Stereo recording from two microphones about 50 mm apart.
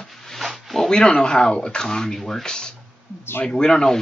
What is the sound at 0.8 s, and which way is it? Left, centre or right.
Speech, centre.